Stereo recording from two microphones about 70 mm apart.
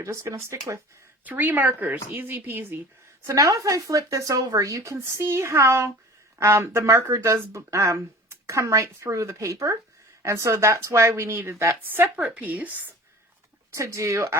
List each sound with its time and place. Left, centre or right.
0.0 s speech: right
1.2 s speech: right
3.2 s speech: right
13.7 s speech: right